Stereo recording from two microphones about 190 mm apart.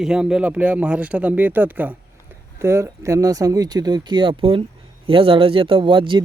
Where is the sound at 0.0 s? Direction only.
5° right (ahead or behind).